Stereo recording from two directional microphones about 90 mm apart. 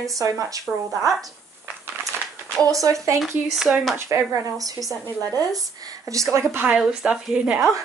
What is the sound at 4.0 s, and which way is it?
Speech, 35° right (ahead or behind).